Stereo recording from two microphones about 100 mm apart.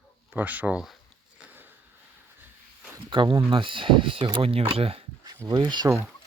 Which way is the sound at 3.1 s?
55° right (ahead or behind).